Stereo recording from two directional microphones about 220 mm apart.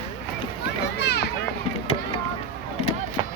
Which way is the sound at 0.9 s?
50° left (ahead or behind).